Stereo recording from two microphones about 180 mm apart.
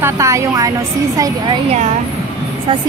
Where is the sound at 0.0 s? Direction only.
15° right (ahead or behind).